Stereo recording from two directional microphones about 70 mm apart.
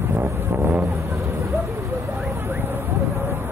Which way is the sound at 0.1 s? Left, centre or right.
Right.